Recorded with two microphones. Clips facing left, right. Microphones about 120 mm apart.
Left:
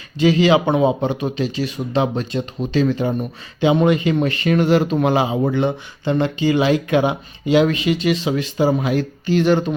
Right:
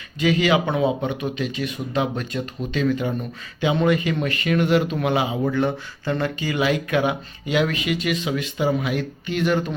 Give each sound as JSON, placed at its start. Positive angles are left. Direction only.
{"t": 0.2, "sound": "speech", "side_deg": 30}